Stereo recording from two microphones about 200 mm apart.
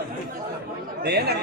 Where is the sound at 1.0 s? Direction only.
55° right (ahead or behind).